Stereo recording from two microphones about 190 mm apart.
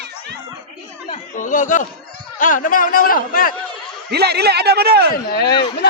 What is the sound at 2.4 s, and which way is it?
A man's voice, 45° left (ahead or behind).